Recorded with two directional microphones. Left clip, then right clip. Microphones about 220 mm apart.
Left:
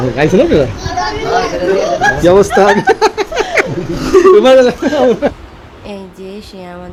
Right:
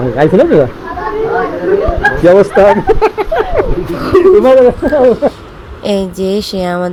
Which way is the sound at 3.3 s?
30° left (ahead or behind).